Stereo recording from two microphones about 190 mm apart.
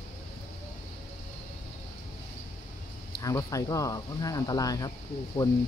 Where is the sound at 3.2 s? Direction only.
20° left (ahead or behind).